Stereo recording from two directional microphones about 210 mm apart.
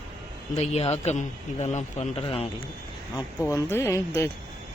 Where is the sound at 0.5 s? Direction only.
30° left (ahead or behind).